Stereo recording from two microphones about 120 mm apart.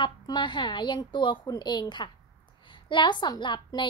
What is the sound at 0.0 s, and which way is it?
A woman's voice, 40° left (ahead or behind).